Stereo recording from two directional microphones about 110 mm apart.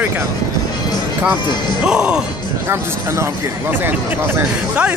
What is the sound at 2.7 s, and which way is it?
Speech, 25° right (ahead or behind).